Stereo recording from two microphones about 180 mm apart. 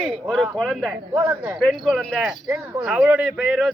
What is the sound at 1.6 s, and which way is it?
Speech, centre (ahead or behind).